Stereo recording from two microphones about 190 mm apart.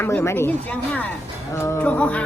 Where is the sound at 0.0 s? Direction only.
15° left (ahead or behind).